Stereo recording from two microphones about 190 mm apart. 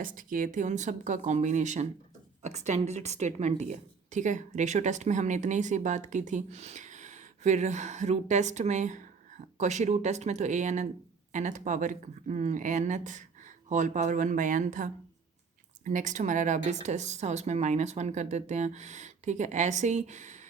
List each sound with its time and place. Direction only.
0.0 s speech: 45° right (ahead or behind)